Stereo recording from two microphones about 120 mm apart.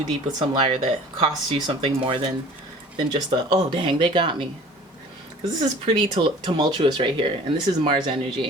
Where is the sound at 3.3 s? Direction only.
35° right (ahead or behind).